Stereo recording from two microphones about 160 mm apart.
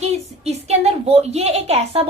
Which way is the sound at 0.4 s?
40° right (ahead or behind).